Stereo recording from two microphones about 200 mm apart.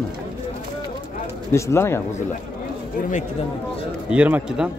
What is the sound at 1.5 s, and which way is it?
Speech, 15° left (ahead or behind).